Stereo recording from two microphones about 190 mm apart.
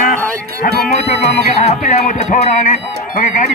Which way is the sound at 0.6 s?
50° left (ahead or behind).